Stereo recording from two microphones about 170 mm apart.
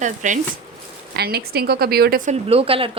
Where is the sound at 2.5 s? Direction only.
35° right (ahead or behind).